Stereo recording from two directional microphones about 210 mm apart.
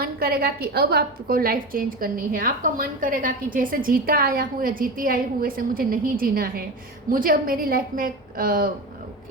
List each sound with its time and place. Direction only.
0.0 s a woman's voice: 45° right (ahead or behind)